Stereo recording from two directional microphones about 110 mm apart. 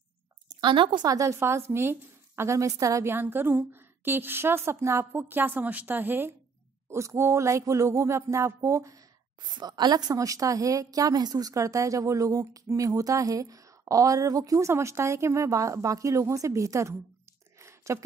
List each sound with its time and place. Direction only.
0.6 s speech: 45° right (ahead or behind)
1.0 s a woman's voice: 30° right (ahead or behind)
9.5 s a woman's voice: 40° right (ahead or behind)
17.6 s a sound: 25° right (ahead or behind)